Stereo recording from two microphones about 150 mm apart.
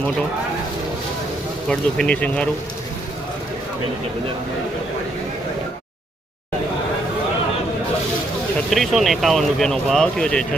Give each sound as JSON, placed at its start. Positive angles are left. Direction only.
{"t": 1.7, "sound": "speech", "side_deg": 5}
{"t": 8.7, "sound": "speech", "side_deg": 0}